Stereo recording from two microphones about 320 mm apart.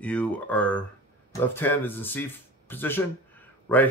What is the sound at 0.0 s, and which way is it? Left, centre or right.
Speech, centre.